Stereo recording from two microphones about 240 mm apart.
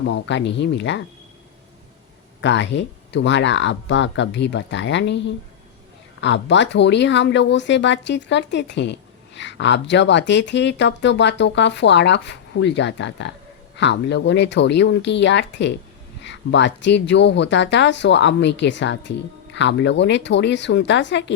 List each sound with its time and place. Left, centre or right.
0.0 s speech: left
2.4 s speech: left
6.2 s speech: left